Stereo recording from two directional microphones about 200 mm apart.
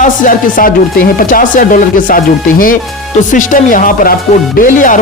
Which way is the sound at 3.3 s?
40° left (ahead or behind).